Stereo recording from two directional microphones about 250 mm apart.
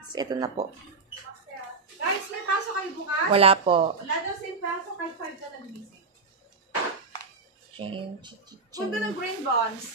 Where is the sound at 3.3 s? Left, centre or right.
Right.